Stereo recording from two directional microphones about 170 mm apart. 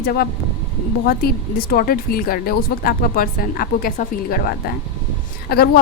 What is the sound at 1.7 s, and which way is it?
Speech, 60° left (ahead or behind).